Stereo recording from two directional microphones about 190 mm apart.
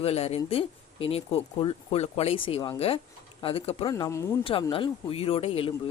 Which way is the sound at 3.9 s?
15° left (ahead or behind).